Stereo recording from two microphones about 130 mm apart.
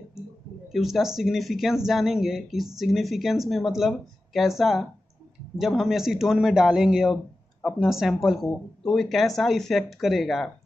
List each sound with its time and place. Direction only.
0.7 s speech: centre (ahead or behind)